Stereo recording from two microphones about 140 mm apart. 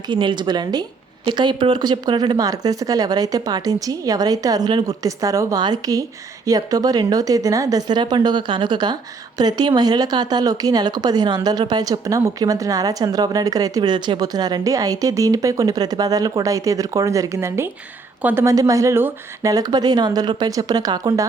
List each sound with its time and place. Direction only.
0.1 s a woman's voice: 35° right (ahead or behind); by 18.4 s 10° right (ahead or behind)
18.4 s a woman's voice: 25° right (ahead or behind)